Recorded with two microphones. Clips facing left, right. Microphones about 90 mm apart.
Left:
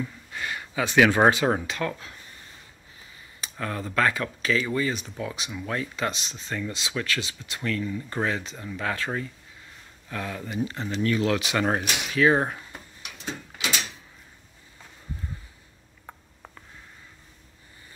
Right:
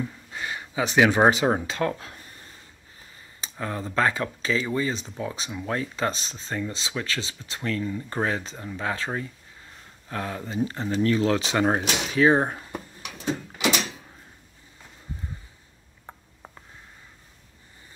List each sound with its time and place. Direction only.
0.0 s speech: 20° right (ahead or behind); by 2.2 s 35° right (ahead or behind)
3.3 s speech: 25° right (ahead or behind)